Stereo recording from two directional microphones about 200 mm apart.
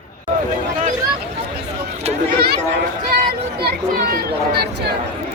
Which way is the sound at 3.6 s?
50° right (ahead or behind).